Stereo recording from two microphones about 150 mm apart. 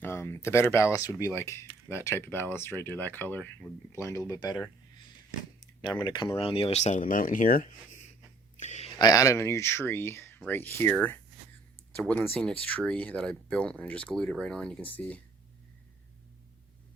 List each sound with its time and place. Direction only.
0.0 s speech: 15° left (ahead or behind); by 8.0 s 65° left (ahead or behind)
8.5 s a sound: 50° left (ahead or behind)
9.0 s speech: 25° left (ahead or behind)